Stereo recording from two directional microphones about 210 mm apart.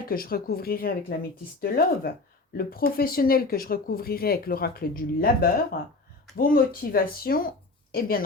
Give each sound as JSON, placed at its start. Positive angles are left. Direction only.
{"t": 0.1, "sound": "speech", "side_deg": 45}